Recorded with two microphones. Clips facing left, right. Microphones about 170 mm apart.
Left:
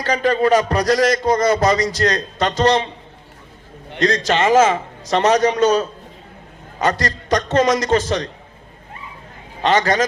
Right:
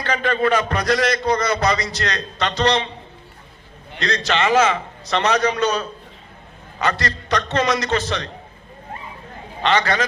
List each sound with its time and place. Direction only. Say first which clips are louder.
0.0 s a man's voice: left 3 dB; 40° left (ahead or behind)
4.0 s a man's voice: left 4 dB; 45° left (ahead or behind)
9.6 s a man's voice: left 3 dB; 45° left (ahead or behind)